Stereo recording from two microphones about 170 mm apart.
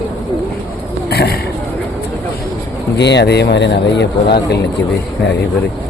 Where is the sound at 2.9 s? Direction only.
90° left.